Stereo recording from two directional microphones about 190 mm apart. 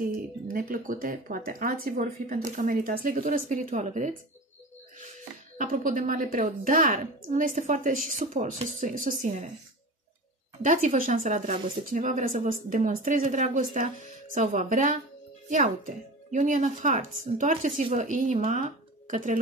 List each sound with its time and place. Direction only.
0.5 s speech: 45° right (ahead or behind)
5.6 s speech: 45° right (ahead or behind)
10.6 s speech: 45° right (ahead or behind)